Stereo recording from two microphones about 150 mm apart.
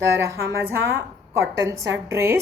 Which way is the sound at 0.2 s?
20° right (ahead or behind).